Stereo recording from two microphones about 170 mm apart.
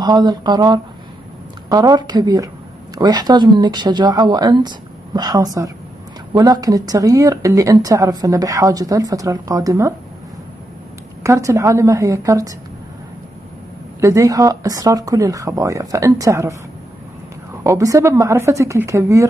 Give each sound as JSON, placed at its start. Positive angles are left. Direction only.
{"t": 0.0, "sound": "a woman's voice", "side_deg": -25}
{"t": 11.2, "sound": "a woman's voice", "side_deg": -20}
{"t": 14.0, "sound": "a woman's voice", "side_deg": -20}
{"t": 17.6, "sound": "speech", "side_deg": -20}